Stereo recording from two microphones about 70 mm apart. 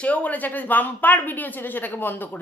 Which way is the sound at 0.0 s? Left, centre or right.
Left.